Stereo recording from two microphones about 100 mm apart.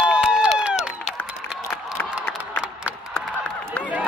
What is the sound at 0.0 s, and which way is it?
Crowd, 10° right (ahead or behind).